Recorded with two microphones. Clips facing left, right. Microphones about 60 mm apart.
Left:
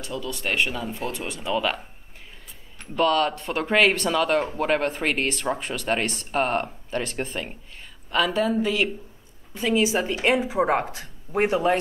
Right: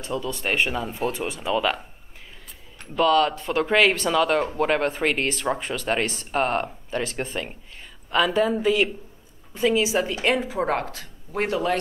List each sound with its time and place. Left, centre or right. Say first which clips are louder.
0.0 s speech: right 2 dB; right
1.5 s speech: right 1 dB; centre
2.8 s speech: right 2 dB; centre
9.9 s speech: even; centre